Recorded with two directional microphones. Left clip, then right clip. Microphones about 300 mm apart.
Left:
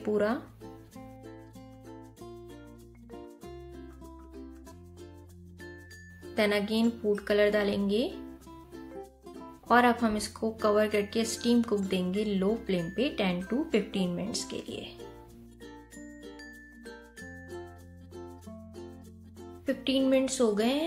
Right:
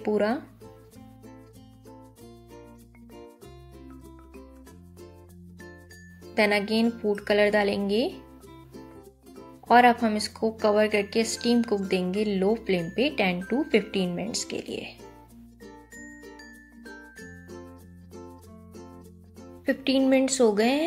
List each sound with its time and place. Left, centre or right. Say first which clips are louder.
0.0 s music: right 3 dB; centre
6.3 s a woman's voice: right 5 dB; centre
9.7 s a woman's voice: right 5 dB; centre
19.6 s a woman's voice: right 4 dB; centre